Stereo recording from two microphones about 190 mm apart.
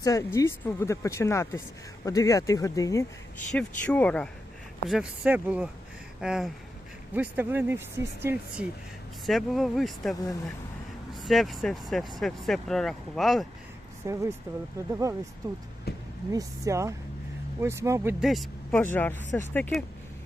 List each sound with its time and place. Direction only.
0.0 s speech: 15° left (ahead or behind)
3.5 s speech: 5° left (ahead or behind)
4.9 s speech: 5° right (ahead or behind)
9.2 s speech: centre (ahead or behind)
14.0 s speech: 15° right (ahead or behind)
15.9 s vehicle: 55° left (ahead or behind)
16.3 s speech: 15° right (ahead or behind)
18.2 s speech: centre (ahead or behind)
18.8 s speech: 10° left (ahead or behind)